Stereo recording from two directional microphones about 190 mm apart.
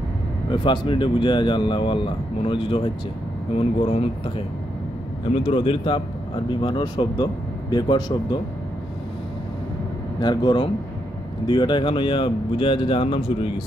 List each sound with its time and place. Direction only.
0.5 s speech: 25° left (ahead or behind)
5.3 s speech: 30° left (ahead or behind)
10.2 s speech: 20° left (ahead or behind)